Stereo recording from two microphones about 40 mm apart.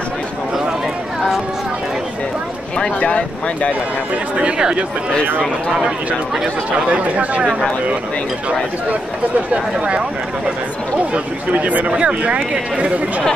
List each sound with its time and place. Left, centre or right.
2.8 s speech: left
4.4 s speech: right
7.0 s speech: right
9.5 s speech: right
11.5 s speech: right
11.9 s speech: right